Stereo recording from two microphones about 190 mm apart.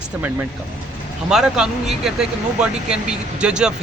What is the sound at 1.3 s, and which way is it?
A man's voice, 5° right (ahead or behind).